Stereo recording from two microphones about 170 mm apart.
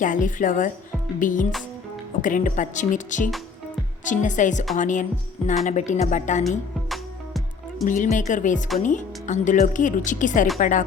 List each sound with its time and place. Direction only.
0.0 s speech: 50° left (ahead or behind)
6.9 s music: centre (ahead or behind)
7.9 s speech: 50° left (ahead or behind)